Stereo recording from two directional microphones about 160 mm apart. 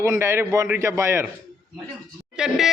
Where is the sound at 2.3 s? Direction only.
5° right (ahead or behind).